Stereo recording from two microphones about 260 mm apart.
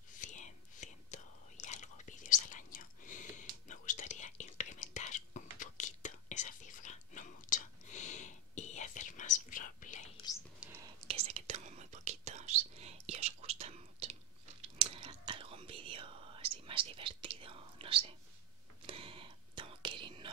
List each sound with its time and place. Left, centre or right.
0.1 s whispering: left
10.6 s whispering: centre
11.1 s whispering: right